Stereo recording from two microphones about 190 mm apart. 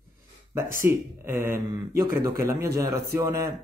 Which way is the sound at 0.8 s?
10° right (ahead or behind).